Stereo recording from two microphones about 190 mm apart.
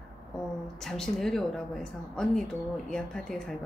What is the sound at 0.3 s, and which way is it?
A woman's voice, 5° left (ahead or behind).